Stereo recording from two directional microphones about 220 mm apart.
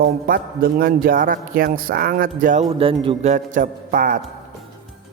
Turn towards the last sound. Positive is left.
turn(degrees=-40)  # may be behind; listen again after turning